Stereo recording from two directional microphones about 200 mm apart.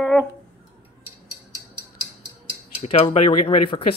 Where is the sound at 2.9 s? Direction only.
30° left (ahead or behind).